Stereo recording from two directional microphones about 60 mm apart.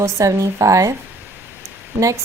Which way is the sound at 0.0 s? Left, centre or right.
Right.